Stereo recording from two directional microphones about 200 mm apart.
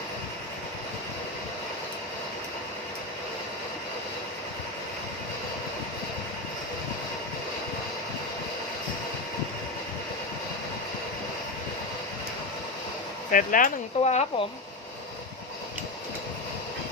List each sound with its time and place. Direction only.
13.3 s speech: 40° left (ahead or behind)